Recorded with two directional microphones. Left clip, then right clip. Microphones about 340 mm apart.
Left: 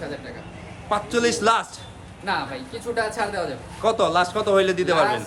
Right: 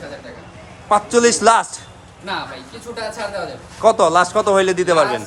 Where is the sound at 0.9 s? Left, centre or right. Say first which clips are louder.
Right 8 dB; right.